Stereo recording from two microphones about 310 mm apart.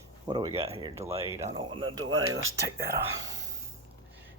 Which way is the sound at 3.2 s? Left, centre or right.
Centre.